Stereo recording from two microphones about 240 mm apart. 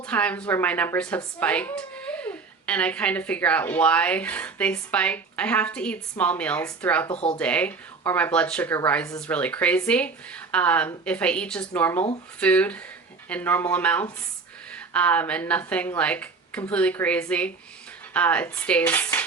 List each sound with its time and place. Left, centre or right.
0.0 s a woman's voice: centre
7.1 s speech: left
7.3 s a woman's voice: centre